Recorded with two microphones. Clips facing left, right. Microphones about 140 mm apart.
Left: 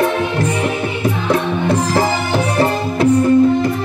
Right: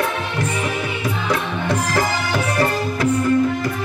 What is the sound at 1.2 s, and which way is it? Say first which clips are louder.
Music: left 6 dB; 25° left (ahead or behind).